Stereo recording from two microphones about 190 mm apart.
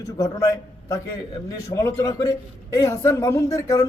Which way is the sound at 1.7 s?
15° left (ahead or behind).